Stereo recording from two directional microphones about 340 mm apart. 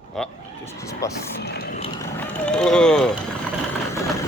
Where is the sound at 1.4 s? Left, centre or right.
Left.